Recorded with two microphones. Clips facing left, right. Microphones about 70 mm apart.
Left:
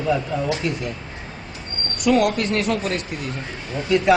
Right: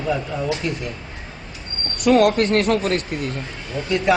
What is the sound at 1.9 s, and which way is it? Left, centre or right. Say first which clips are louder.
Speech: right 3 dB; right.